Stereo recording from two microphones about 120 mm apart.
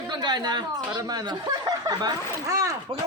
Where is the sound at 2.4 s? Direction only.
25° right (ahead or behind).